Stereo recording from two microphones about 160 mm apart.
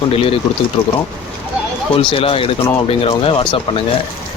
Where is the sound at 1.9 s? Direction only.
35° left (ahead or behind).